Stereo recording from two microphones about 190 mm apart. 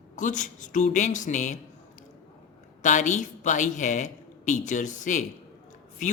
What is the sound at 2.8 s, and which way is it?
A woman's voice, 40° left (ahead or behind).